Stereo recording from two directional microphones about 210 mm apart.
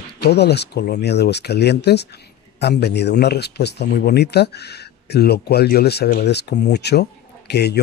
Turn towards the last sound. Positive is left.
turn(degrees=50)  # may be behind; listen again after turning